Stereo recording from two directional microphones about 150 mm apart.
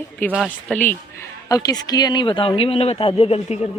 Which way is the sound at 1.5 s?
25° left (ahead or behind).